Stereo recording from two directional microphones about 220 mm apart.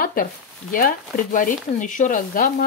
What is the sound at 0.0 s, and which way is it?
Speech, 40° left (ahead or behind).